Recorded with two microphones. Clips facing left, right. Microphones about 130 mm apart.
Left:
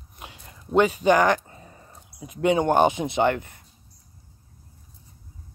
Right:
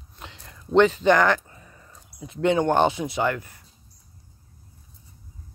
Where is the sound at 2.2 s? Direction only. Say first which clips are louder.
Even; 15° left (ahead or behind).